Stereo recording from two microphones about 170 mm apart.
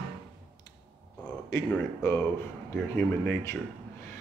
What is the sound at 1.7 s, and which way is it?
Speech, 15° left (ahead or behind).